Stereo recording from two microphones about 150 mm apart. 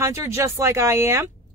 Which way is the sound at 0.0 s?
20° right (ahead or behind).